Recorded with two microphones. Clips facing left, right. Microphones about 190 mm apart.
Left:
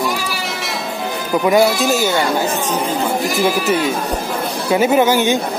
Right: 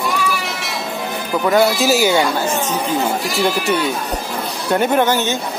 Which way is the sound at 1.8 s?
10° right (ahead or behind).